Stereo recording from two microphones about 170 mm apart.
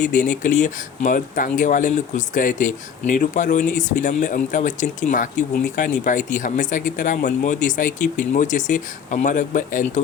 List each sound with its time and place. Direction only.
0.3 s speech: 50° left (ahead or behind)